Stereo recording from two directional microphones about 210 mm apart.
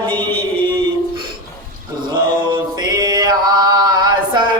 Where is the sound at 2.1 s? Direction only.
20° right (ahead or behind).